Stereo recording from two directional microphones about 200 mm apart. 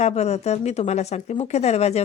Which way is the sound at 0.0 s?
35° left (ahead or behind).